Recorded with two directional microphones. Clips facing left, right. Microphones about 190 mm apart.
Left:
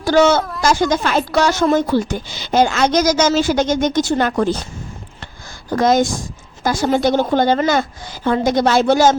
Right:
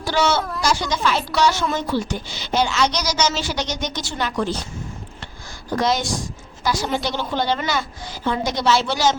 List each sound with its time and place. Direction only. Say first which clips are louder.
0.0 s a woman's voice: left 7 dB; 50° left (ahead or behind)
5.7 s a woman's voice: left 6 dB; 50° left (ahead or behind)